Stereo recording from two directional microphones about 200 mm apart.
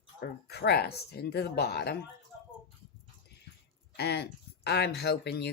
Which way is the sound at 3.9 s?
55° left (ahead or behind).